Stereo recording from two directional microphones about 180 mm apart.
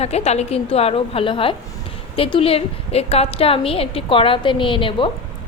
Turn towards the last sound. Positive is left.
turn(degrees=30)  # may be behind; listen again after turning